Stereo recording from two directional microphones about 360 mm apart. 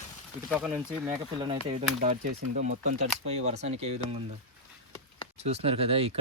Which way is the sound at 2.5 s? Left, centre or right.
Right.